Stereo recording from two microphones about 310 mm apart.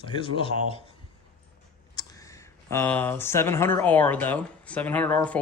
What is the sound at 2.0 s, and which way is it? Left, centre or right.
Speech, centre.